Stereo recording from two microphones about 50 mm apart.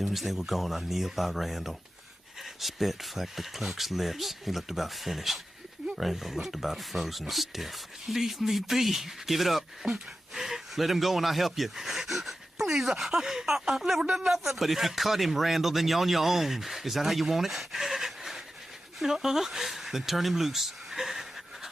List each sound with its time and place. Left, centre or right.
0.0 s a man's voice: centre